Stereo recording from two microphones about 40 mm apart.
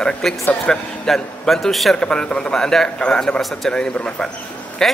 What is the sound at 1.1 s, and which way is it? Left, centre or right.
Speech, centre.